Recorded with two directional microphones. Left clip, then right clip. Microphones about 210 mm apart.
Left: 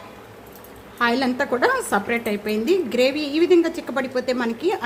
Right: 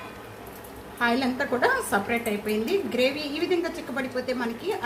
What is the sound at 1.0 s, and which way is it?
A woman's voice, 50° left (ahead or behind).